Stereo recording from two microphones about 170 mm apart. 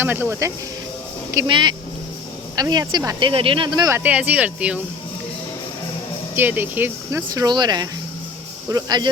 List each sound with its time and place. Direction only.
0.0 s speech: 10° right (ahead or behind)
1.5 s speech: 30° right (ahead or behind)
4.0 s speech: 10° right (ahead or behind)
6.3 s speech: 10° right (ahead or behind)